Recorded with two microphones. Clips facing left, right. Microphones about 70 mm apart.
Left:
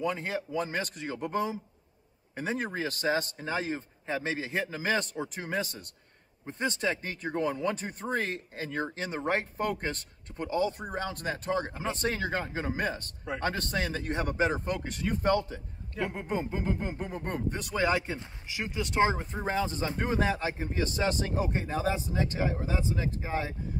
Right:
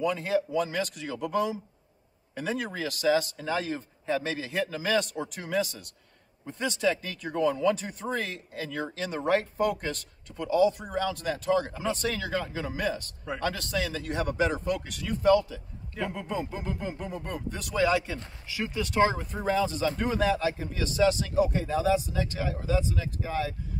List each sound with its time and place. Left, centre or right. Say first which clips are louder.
0.0 s speech: right 5 dB; left
16.1 s speech: even; left